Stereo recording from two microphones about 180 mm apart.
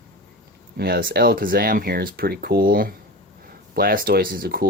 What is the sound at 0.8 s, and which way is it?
Speech, 55° right (ahead or behind).